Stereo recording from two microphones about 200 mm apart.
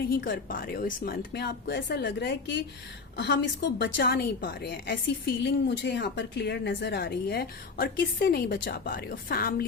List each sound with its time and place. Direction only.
0.1 s a woman's voice: 45° left (ahead or behind)